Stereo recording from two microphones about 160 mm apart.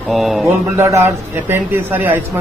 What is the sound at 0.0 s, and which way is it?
Speech, centre (ahead or behind).